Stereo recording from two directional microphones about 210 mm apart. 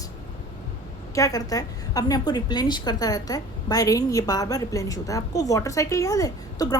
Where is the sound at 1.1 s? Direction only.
15° left (ahead or behind).